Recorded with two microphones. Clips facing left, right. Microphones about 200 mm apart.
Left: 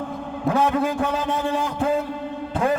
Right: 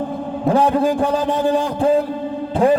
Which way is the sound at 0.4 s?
35° right (ahead or behind).